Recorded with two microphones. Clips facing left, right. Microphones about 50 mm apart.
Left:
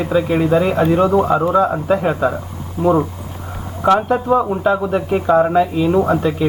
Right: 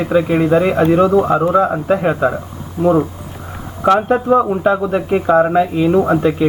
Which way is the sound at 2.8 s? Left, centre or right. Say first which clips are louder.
Right 2 dB; centre.